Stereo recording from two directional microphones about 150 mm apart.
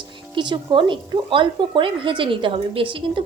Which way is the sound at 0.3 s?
30° right (ahead or behind).